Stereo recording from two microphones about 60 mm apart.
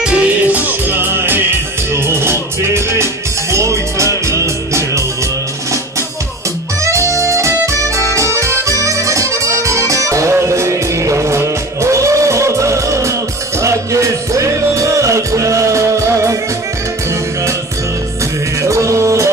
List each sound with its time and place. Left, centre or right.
0.0 s music: centre
0.7 s music: right
6.8 s music: right
18.6 s music: right